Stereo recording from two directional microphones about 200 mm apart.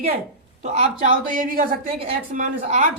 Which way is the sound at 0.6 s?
35° right (ahead or behind).